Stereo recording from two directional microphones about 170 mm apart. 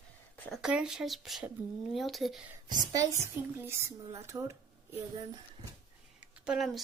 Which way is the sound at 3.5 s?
15° right (ahead or behind).